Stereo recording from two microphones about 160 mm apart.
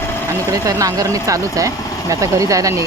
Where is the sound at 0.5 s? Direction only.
20° right (ahead or behind).